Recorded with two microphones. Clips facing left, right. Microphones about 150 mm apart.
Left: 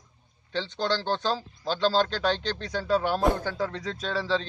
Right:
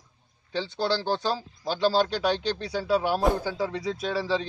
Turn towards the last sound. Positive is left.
turn(degrees=-10)  # may be behind; listen again after turning